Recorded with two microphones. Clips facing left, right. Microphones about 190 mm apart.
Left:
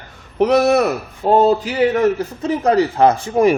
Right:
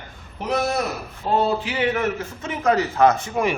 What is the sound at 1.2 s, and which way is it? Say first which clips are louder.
A man's voice: left 8 dB; 45° left (ahead or behind).